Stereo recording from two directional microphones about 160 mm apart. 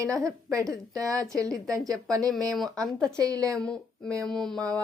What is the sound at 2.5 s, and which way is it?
Speech, centre (ahead or behind).